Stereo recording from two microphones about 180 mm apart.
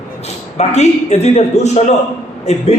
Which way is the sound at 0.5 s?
40° left (ahead or behind).